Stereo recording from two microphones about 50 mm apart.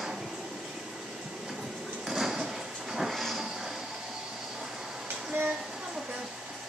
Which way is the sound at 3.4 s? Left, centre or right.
Centre.